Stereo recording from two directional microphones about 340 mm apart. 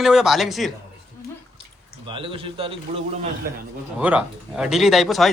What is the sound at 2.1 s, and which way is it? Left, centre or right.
Speech, centre.